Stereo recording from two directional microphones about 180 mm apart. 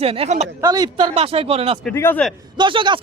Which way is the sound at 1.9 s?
10° left (ahead or behind).